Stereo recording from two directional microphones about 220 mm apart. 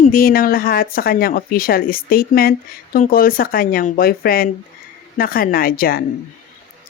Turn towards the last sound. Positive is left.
turn(degrees=40)  # may be behind; listen again after turning